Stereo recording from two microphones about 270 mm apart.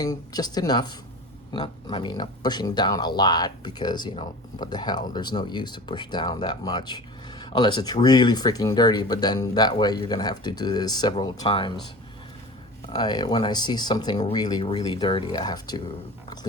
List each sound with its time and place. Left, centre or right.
0.0 s speech: centre
12.9 s speech: centre